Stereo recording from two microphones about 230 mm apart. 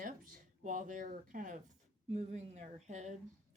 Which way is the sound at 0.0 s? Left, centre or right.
Right.